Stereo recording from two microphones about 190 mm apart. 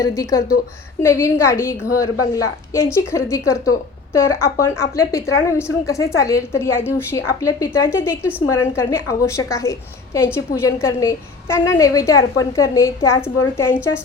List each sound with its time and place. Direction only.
0.0 s a woman's voice: 15° left (ahead or behind)